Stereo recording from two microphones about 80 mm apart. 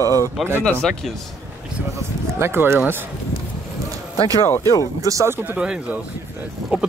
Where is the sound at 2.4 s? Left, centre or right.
Right.